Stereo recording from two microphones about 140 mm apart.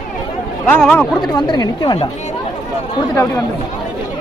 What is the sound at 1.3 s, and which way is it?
Speech, 30° left (ahead or behind).